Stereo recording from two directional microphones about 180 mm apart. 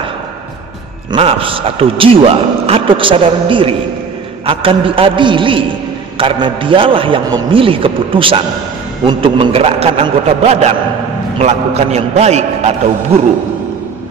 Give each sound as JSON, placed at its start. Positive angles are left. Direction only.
{"t": 1.1, "sound": "a man's voice", "side_deg": -30}